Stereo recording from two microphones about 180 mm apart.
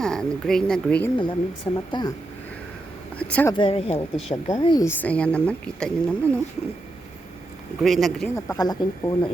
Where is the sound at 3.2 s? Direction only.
5° left (ahead or behind).